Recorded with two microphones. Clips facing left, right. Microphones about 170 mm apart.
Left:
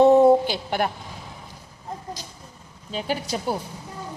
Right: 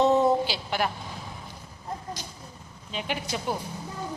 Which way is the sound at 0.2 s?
55° left (ahead or behind).